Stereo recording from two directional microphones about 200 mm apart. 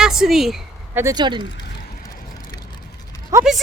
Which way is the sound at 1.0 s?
20° right (ahead or behind).